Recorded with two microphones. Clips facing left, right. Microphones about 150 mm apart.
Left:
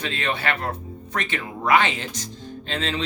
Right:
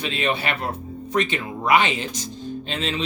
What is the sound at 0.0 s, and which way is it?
Speech, 15° right (ahead or behind).